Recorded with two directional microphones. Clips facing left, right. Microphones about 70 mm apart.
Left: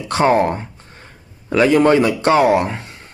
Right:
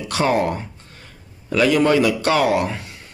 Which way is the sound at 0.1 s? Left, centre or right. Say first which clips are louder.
Left 5 dB; left.